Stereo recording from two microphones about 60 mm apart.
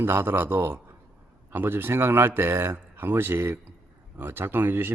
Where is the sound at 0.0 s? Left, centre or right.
Right.